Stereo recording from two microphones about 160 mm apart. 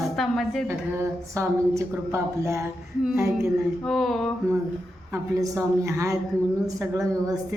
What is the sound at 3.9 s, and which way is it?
Speech, centre (ahead or behind).